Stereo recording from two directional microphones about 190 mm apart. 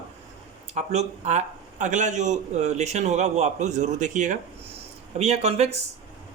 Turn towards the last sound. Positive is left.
turn(degrees=-35)  # may be behind; listen again after turning